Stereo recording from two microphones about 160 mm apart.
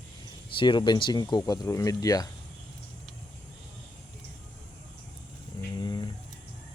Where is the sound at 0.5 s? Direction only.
30° left (ahead or behind).